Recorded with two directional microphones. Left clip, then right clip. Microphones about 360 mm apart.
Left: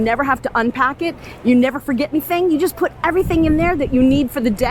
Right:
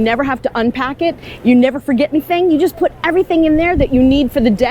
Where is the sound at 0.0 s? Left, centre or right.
Centre.